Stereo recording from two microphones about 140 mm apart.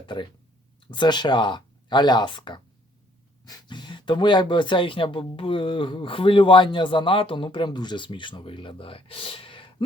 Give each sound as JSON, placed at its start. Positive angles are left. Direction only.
{"t": 0.0, "sound": "speech", "side_deg": 35}